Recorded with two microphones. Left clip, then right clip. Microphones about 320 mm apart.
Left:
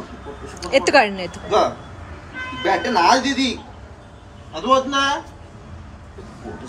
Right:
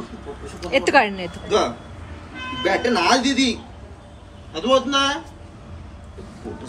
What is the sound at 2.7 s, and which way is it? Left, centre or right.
Speech, centre.